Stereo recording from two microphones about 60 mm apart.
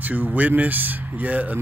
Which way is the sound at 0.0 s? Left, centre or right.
Right.